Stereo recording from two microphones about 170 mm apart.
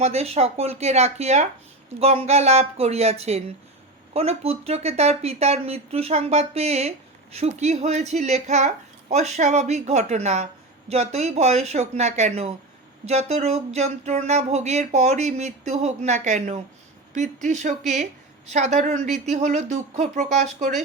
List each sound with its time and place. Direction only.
0.0 s a woman's voice: 40° right (ahead or behind)